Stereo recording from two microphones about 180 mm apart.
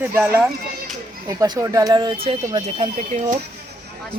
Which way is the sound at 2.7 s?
35° right (ahead or behind).